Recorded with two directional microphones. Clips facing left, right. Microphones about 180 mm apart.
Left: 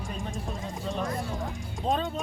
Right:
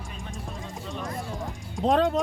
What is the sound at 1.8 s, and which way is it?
Speech, 80° right.